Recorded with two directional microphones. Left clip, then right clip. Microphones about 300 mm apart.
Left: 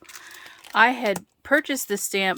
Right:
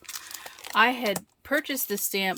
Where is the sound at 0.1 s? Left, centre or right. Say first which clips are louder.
Right 2 dB; centre.